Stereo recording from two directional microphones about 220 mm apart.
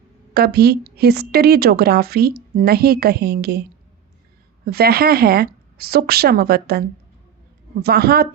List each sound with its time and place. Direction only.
0.3 s a woman's voice: 45° right (ahead or behind)
4.6 s a woman's voice: 45° right (ahead or behind)